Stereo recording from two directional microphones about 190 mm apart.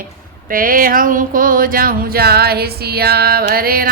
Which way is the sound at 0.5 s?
50° right (ahead or behind).